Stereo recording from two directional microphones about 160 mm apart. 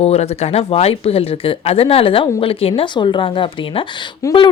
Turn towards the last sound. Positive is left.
turn(degrees=25)  # may be behind; listen again after turning